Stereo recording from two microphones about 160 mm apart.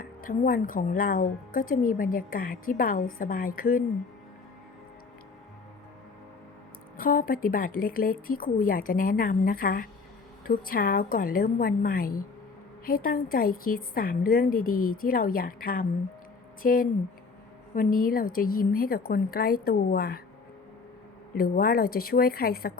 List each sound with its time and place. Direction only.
0.0 s a woman's voice: 60° left (ahead or behind)
6.9 s a woman's voice: 60° left (ahead or behind)
21.3 s a woman's voice: 65° left (ahead or behind)